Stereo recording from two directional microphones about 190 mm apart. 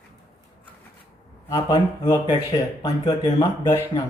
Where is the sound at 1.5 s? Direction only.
20° left (ahead or behind).